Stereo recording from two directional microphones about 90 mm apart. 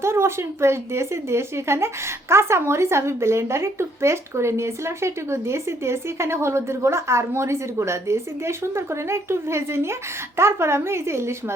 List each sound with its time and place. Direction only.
0.0 s speech: 30° right (ahead or behind)